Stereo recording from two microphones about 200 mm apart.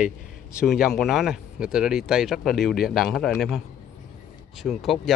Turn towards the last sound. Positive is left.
turn(degrees=0)  # may be behind; listen again after turning